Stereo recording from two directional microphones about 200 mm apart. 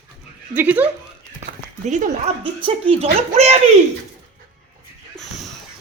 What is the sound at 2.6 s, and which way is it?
Speech, 25° right (ahead or behind).